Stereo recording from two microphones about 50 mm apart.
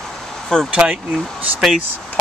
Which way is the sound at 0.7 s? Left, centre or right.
Right.